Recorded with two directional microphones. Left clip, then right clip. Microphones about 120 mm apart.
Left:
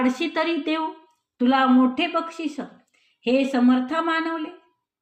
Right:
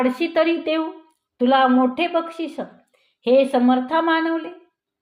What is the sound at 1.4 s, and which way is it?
A woman's voice, 50° right (ahead or behind).